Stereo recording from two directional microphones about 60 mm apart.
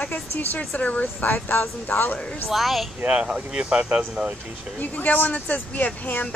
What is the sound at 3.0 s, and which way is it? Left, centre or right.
Speech, centre.